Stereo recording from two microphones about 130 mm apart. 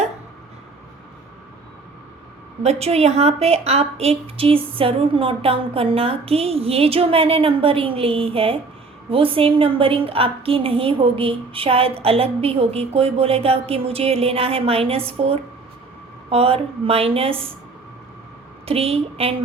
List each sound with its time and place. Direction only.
2.6 s a woman's voice: 55° right (ahead or behind)
18.6 s a woman's voice: 50° right (ahead or behind)